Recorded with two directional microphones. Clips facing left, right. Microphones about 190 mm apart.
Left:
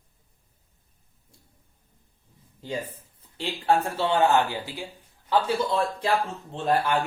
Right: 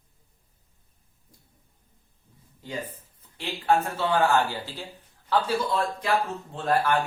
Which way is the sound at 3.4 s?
30° left (ahead or behind).